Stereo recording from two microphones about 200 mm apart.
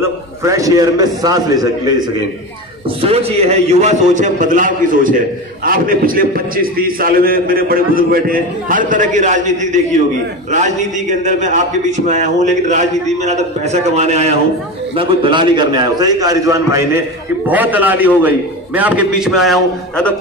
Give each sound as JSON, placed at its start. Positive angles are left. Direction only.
{"t": 0.0, "sound": "a man's voice", "side_deg": -15}
{"t": 3.0, "sound": "a man's voice", "side_deg": -30}